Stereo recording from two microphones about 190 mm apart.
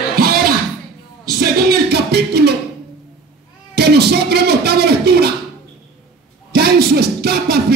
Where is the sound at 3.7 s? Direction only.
60° right (ahead or behind).